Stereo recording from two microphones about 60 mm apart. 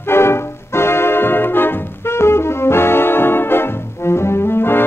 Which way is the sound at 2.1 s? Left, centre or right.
Left.